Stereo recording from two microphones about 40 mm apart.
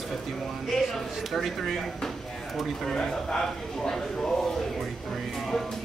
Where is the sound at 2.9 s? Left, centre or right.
Centre.